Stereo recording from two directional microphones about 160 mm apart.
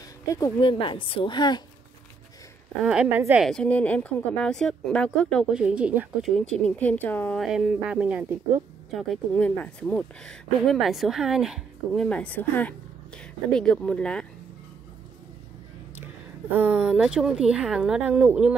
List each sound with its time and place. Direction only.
0.3 s a woman's voice: 25° left (ahead or behind)
2.8 s speech: 5° right (ahead or behind)
3.4 s speech: 5° left (ahead or behind)
5.5 s speech: 5° right (ahead or behind)
7.4 s speech: 5° right (ahead or behind)
8.9 s speech: 5° left (ahead or behind)
16.5 s speech: 10° right (ahead or behind)